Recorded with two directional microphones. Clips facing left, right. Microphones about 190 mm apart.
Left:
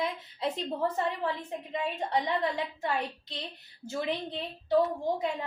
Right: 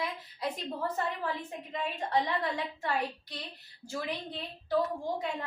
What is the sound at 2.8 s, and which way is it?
A woman's voice, 25° left (ahead or behind).